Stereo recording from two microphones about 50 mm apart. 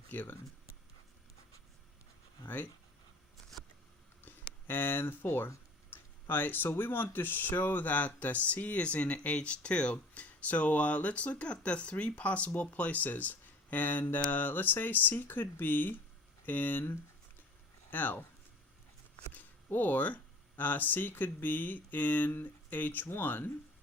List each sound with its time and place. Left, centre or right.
0.1 s speech: left
4.2 s a sound: left
5.9 s speech: left
17.9 s speech: left
19.3 s speech: left